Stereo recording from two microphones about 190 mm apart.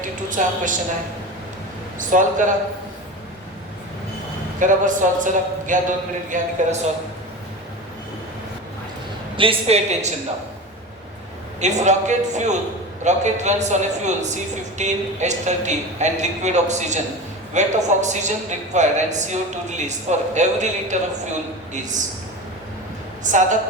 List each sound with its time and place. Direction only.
0.0 s a sound: 45° right (ahead or behind)
2.0 s a man's voice: 40° right (ahead or behind)
4.6 s a man's voice: 40° right (ahead or behind)
9.3 s a man's voice: 30° right (ahead or behind)
11.6 s a man's voice: 35° right (ahead or behind)
23.2 s a man's voice: 40° right (ahead or behind)